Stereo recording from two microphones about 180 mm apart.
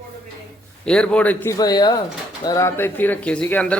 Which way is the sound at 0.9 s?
5° left (ahead or behind).